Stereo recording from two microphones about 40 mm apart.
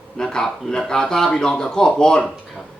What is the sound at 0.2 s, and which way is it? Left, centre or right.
Speech, centre.